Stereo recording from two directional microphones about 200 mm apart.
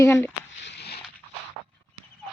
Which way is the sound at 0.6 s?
55° left (ahead or behind).